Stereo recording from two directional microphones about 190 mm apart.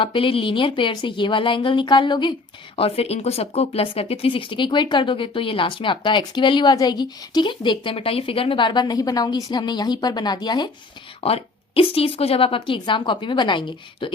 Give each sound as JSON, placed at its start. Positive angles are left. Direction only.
{"t": 0.0, "sound": "speech", "side_deg": 25}